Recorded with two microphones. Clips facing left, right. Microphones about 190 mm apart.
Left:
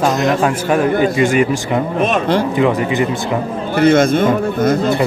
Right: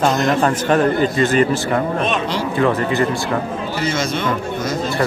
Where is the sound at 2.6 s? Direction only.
15° left (ahead or behind).